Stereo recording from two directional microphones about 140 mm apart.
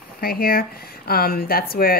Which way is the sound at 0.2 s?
90° left.